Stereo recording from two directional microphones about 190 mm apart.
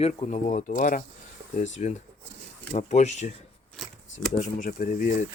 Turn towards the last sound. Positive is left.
turn(degrees=40)  # may be behind; listen again after turning